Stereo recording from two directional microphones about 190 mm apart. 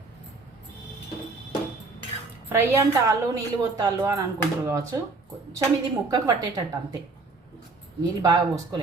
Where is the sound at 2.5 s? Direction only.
10° right (ahead or behind).